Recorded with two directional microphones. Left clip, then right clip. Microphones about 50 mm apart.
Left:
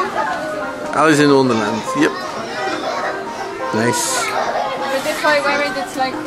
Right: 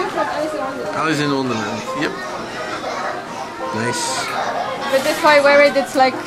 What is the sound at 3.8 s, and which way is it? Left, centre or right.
Speech, left.